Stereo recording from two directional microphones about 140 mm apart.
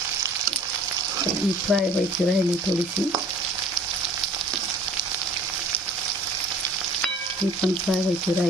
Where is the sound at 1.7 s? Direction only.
10° right (ahead or behind).